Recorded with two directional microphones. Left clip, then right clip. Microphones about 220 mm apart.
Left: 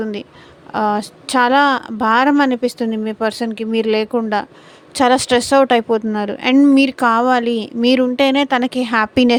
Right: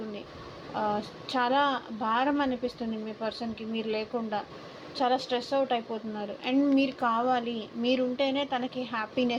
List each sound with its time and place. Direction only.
0.7 s a woman's voice: 60° left (ahead or behind)